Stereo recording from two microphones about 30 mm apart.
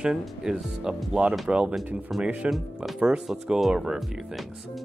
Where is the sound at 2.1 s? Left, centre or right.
Centre.